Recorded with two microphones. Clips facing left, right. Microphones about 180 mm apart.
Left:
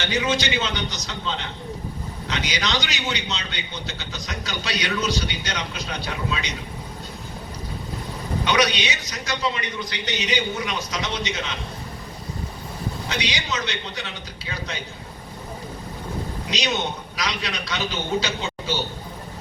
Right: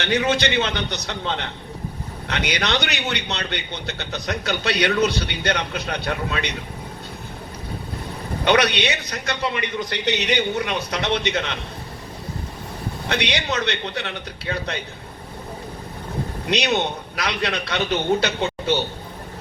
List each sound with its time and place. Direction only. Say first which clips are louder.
0.0 s a man's voice: right 3 dB; 60° right (ahead or behind)
8.4 s a man's voice: right 4 dB; 60° right (ahead or behind)
13.1 s a man's voice: right 6 dB; 60° right (ahead or behind)
16.5 s a man's voice: right 5 dB; 60° right (ahead or behind)